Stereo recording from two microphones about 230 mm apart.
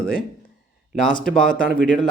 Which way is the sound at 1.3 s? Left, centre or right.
Centre.